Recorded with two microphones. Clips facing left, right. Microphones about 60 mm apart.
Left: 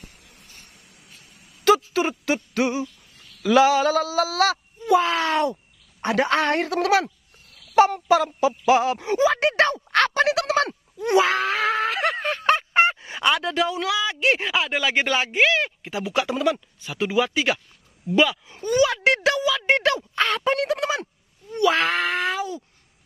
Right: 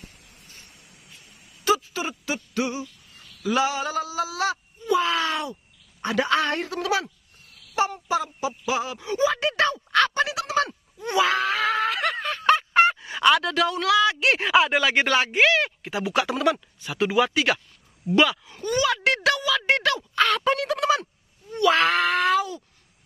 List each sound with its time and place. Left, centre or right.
1.6 s a sound: left
3.4 s speech: left
4.9 s a woman's voice: left
9.9 s a sound: left
11.1 s a sound: left
13.0 s speech: centre
19.0 s speech: left
20.8 s speech: left
21.5 s speech: centre